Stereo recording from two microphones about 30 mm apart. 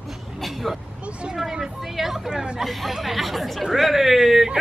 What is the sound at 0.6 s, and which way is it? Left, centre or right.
Speech, centre.